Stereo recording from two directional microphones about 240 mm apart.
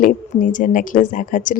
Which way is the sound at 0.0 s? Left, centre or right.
Left.